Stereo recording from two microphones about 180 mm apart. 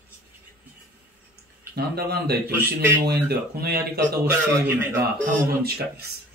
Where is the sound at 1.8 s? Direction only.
60° right (ahead or behind).